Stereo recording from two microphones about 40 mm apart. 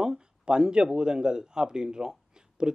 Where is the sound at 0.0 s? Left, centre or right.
Centre.